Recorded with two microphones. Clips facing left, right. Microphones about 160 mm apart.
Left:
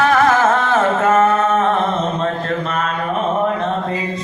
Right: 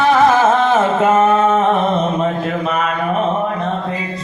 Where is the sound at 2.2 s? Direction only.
10° right (ahead or behind).